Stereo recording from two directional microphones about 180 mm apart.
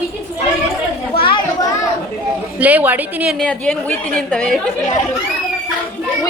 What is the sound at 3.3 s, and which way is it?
A woman's voice, 5° left (ahead or behind).